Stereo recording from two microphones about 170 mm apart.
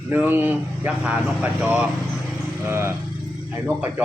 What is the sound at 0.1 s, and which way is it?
A man's voice, 10° right (ahead or behind).